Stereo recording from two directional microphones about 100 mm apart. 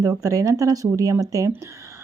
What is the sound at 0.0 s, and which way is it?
Speech, 35° right (ahead or behind).